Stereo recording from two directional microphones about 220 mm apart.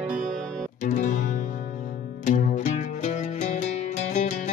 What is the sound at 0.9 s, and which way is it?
Music, 35° left (ahead or behind).